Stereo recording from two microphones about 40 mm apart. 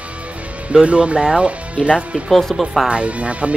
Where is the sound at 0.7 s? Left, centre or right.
Right.